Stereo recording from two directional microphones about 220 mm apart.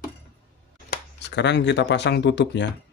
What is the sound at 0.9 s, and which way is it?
Speech, 50° left (ahead or behind).